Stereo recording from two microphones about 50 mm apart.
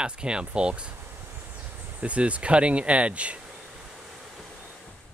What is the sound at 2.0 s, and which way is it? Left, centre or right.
Speech, right.